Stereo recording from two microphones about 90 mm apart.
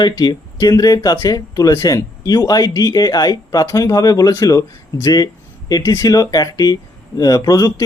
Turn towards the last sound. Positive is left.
turn(degrees=40)  # may be behind; listen again after turning